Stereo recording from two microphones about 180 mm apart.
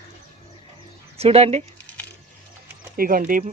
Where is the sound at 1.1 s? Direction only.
35° right (ahead or behind).